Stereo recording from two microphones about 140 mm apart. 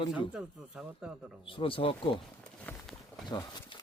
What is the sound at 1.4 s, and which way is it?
Speech, 40° left (ahead or behind).